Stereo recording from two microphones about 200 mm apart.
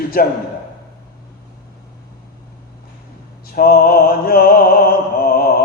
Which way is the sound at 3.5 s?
45° left (ahead or behind).